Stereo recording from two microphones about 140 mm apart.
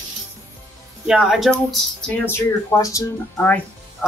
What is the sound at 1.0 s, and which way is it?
Speech, 5° right (ahead or behind).